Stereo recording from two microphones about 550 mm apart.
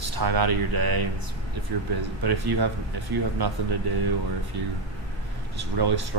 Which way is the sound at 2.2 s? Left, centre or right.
Right.